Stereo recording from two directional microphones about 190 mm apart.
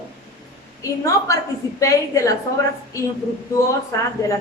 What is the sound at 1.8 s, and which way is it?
Speech, 15° left (ahead or behind).